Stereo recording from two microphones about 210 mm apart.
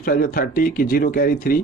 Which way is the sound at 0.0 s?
45° left (ahead or behind).